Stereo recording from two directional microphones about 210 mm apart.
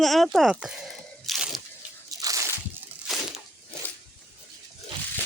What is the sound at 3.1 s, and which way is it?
Crunch, centre (ahead or behind).